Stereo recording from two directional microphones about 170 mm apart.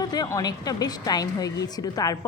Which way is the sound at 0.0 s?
25° left (ahead or behind).